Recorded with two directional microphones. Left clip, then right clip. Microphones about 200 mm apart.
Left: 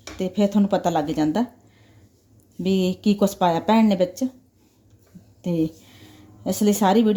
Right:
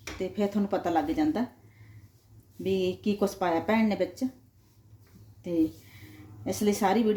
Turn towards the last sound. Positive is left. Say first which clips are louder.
# left 6 dB
turn(degrees=45)  # may be behind; listen again after turning